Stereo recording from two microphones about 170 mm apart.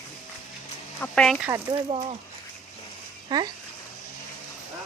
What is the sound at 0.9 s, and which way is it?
Speech, 10° left (ahead or behind).